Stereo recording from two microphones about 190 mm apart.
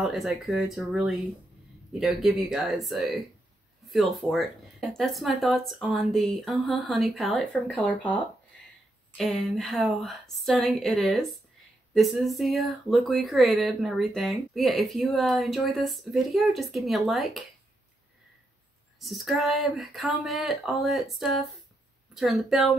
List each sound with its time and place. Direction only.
0.0 s speech: centre (ahead or behind)
18.9 s speech: centre (ahead or behind)